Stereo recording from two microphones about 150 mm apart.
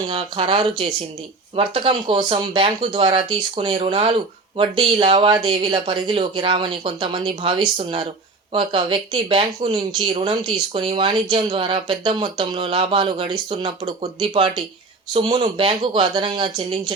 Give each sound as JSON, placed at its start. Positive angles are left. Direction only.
{"t": 0.1, "sound": "speech", "side_deg": -35}